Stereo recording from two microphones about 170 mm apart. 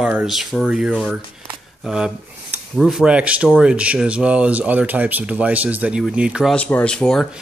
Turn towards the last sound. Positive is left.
turn(degrees=5)  # may be behind; listen again after turning